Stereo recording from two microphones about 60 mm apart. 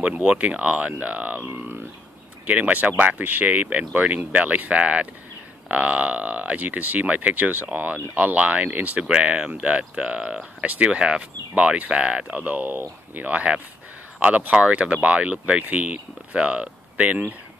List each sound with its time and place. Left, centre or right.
0.0 s speech: centre; by 1.9 s right
2.4 s speech: right
12.7 s speech: right
13.3 s speech: right